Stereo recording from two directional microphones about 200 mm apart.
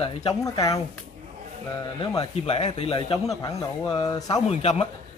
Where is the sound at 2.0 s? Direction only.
25° left (ahead or behind).